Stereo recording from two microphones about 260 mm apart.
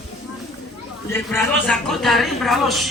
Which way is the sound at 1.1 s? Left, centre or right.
Centre.